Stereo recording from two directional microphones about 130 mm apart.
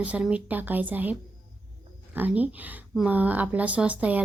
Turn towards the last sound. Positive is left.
turn(degrees=-10)  # may be behind; listen again after turning